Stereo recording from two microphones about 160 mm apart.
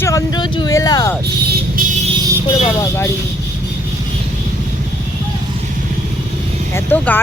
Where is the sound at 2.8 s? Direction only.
15° left (ahead or behind).